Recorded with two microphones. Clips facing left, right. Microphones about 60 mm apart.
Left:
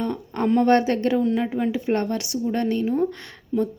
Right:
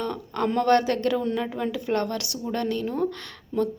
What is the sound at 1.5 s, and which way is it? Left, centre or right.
Speech, centre.